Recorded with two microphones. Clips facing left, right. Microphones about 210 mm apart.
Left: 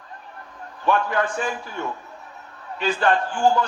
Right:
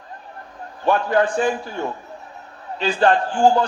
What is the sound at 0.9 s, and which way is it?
A man's voice, 35° right (ahead or behind).